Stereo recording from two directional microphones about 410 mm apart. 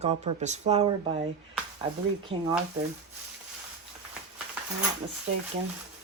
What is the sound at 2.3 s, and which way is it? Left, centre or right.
Speech, centre.